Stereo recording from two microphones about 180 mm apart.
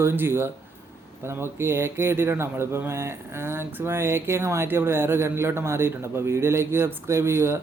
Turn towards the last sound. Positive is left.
turn(degrees=-15)  # may be behind; listen again after turning